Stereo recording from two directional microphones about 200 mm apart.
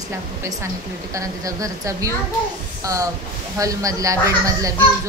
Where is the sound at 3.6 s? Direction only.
15° right (ahead or behind).